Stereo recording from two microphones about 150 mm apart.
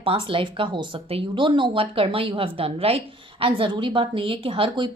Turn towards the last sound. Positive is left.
turn(degrees=-35)  # may be behind; listen again after turning